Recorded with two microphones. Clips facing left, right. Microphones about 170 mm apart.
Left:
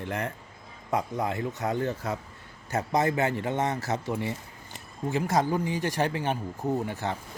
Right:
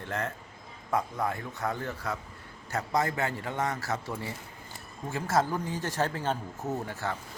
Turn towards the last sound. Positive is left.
turn(degrees=20)  # may be behind; listen again after turning